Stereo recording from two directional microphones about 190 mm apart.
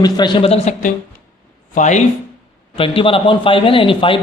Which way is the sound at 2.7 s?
30° left (ahead or behind).